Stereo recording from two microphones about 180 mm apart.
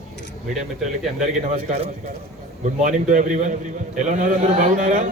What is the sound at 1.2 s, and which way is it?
A man's voice, 40° right (ahead or behind).